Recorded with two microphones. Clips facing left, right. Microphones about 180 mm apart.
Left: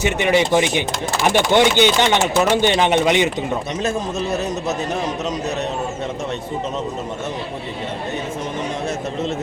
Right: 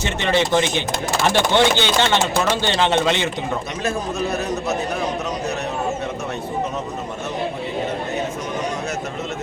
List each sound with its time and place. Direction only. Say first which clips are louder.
0.0 s speech: left 3 dB; 15° left (ahead or behind)